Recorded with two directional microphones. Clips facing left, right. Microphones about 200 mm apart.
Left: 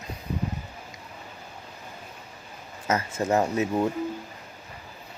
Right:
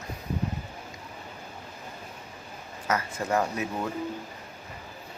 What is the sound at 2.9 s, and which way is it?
Speech, 25° left (ahead or behind).